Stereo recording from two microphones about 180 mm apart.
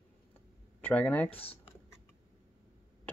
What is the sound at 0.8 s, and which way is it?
Speech, 10° left (ahead or behind).